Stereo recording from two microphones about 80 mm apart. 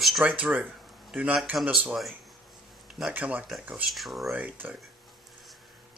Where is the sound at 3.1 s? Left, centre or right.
Centre.